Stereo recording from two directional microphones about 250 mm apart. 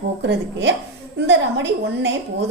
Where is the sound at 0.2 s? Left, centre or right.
Right.